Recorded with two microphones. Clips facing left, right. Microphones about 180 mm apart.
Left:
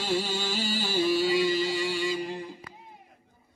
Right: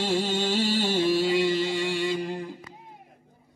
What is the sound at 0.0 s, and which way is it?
Music, 25° right (ahead or behind).